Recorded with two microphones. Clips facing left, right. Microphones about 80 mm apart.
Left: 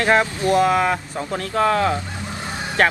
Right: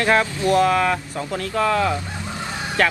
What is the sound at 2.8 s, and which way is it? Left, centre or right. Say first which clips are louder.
Speech: left 2 dB; left.